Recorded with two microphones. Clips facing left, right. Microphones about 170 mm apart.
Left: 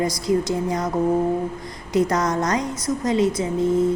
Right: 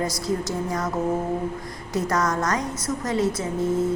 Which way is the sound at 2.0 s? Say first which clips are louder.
Left 4 dB; 20° left (ahead or behind).